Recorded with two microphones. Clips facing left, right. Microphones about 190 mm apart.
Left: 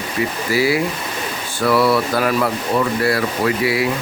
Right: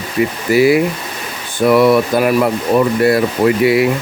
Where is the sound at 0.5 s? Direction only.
20° right (ahead or behind).